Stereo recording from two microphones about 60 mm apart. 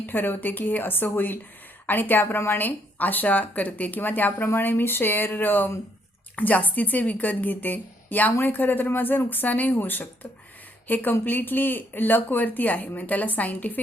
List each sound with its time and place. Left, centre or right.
0.0 s a woman's voice: left
4.3 s a woman's voice: left